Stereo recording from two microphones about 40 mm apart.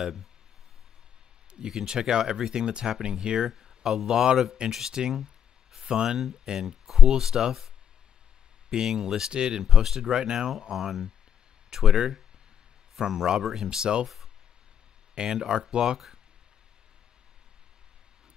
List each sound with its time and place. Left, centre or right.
0.0 s speech: centre
1.7 s speech: centre
5.2 s a sound: centre
5.9 s speech: centre
13.7 s speech: right
14.0 s speech: centre
15.1 s speech: centre